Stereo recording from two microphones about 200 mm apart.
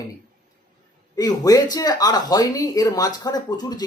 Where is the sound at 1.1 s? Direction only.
20° left (ahead or behind).